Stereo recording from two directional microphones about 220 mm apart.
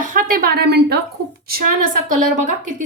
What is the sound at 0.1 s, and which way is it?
Speech, 40° right (ahead or behind).